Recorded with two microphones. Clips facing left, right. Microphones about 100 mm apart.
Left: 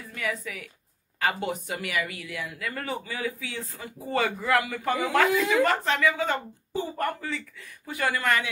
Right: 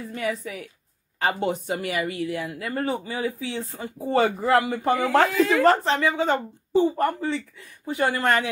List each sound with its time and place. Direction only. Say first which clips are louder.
0.0 s a woman's voice: right 4 dB; 30° right (ahead or behind)